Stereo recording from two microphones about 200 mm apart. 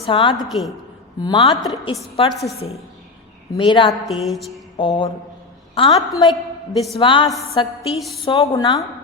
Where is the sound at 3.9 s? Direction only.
Centre (ahead or behind).